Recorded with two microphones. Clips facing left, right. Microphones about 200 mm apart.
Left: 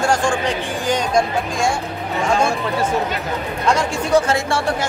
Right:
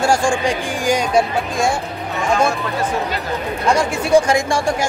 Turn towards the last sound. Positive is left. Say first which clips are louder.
# right 2 dB
turn(degrees=-15)  # may be behind; listen again after turning